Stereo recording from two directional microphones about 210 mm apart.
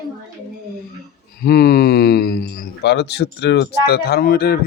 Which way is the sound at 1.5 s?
50° left (ahead or behind).